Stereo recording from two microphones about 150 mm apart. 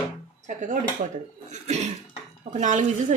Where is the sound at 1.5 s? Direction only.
50° right (ahead or behind).